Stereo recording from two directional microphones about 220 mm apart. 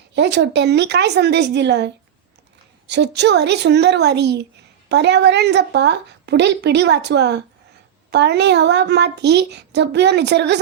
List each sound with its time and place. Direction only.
0.1 s a woman's voice: 50° right (ahead or behind)